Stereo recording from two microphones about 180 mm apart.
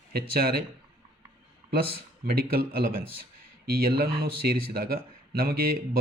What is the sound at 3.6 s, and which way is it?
Speech, 55° right (ahead or behind).